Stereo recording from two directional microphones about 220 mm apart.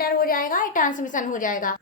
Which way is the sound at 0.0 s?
40° left (ahead or behind).